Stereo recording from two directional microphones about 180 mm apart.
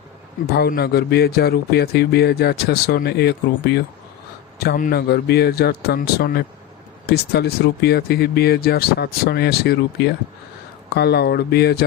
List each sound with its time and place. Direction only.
0.5 s a man's voice: 60° left (ahead or behind)